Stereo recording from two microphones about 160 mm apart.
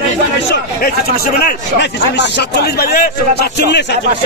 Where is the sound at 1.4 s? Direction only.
90° left.